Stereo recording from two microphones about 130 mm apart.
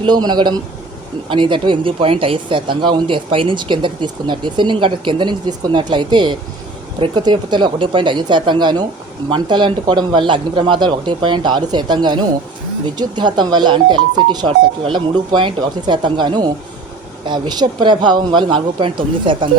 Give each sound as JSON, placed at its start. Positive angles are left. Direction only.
{"t": 0.0, "sound": "speech", "side_deg": -35}